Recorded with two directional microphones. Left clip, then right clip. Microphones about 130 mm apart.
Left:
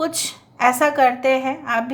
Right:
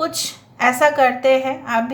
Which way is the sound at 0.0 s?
25° left (ahead or behind).